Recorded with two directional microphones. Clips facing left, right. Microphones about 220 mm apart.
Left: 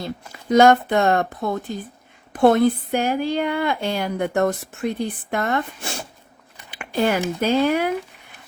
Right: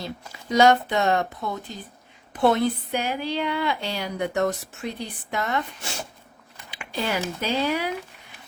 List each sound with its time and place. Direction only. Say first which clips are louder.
0.5 s speech: left 4 dB; 50° left (ahead or behind)
6.7 s a sound: left 7 dB; 50° left (ahead or behind)
7.4 s speech: left 7 dB; 50° left (ahead or behind)